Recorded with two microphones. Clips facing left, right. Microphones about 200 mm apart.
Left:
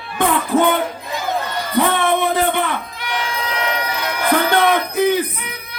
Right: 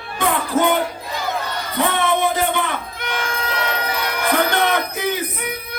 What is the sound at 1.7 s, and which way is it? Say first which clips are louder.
Music: left 3 dB; 55° left (ahead or behind).